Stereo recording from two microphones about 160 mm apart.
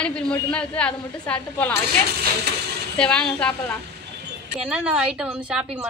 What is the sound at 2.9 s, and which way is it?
Speech, 5° left (ahead or behind).